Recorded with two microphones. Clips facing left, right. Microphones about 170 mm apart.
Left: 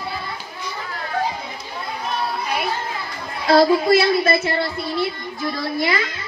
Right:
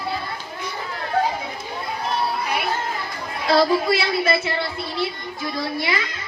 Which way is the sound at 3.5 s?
45° left (ahead or behind).